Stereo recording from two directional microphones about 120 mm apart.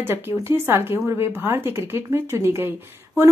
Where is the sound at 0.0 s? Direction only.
20° right (ahead or behind).